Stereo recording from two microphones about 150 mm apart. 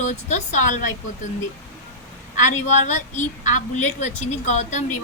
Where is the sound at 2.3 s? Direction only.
55° left (ahead or behind).